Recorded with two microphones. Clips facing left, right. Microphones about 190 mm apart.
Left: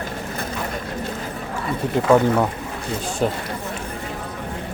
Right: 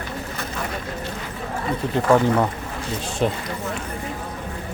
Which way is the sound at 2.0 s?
5° left (ahead or behind).